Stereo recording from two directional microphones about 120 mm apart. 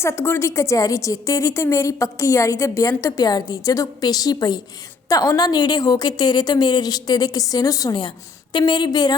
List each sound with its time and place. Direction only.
0.0 s a woman's voice: 20° left (ahead or behind)